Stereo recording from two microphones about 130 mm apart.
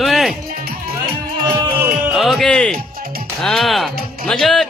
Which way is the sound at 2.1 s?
Centre (ahead or behind).